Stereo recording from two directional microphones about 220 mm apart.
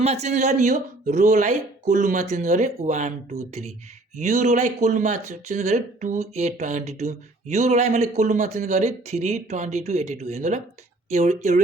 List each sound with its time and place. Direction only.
0.0 s speech: 30° right (ahead or behind)